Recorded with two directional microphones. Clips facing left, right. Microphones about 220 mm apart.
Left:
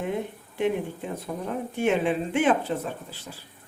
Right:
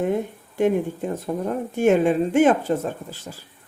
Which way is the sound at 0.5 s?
45° right (ahead or behind).